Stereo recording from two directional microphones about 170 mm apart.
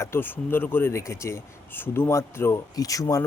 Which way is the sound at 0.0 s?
15° left (ahead or behind).